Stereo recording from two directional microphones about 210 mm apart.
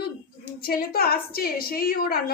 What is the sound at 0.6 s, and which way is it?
A woman's voice, 45° left (ahead or behind).